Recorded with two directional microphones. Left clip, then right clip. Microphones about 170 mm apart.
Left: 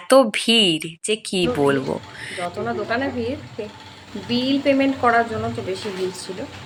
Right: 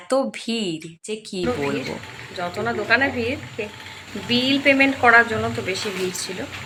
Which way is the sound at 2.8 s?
15° left (ahead or behind).